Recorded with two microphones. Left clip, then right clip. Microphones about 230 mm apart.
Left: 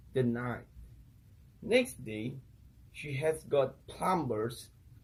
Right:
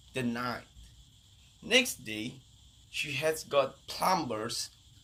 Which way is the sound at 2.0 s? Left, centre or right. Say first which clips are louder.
Right 2 dB; right.